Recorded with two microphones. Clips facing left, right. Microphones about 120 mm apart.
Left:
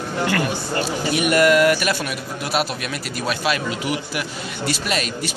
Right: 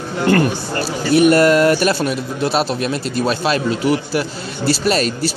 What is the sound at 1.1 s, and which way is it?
Speech, 30° right (ahead or behind).